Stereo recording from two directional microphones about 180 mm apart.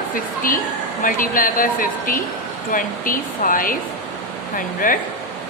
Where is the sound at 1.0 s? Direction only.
50° left (ahead or behind).